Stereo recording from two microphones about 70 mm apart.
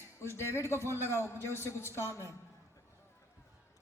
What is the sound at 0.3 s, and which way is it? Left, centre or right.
A man's voice, left.